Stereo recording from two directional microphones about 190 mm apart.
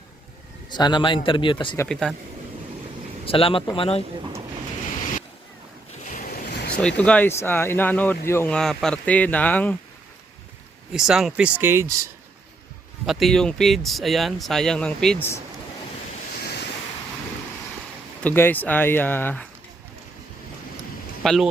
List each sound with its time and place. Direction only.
0.7 s a man's voice: 25° left (ahead or behind)
1.8 s speech: 5° left (ahead or behind)
3.2 s a man's voice: 30° left (ahead or behind)
6.0 s waves: 40° left (ahead or behind)
6.7 s speech: 5° left (ahead or behind)
10.9 s speech: 5° right (ahead or behind)
13.1 s speech: centre (ahead or behind)
16.4 s waves: 55° left (ahead or behind)
18.2 s speech: 10° left (ahead or behind)
21.2 s speech: centre (ahead or behind)